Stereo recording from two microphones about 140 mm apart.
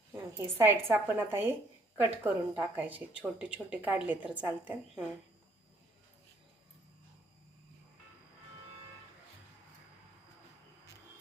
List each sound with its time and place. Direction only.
0.3 s speech: 15° right (ahead or behind)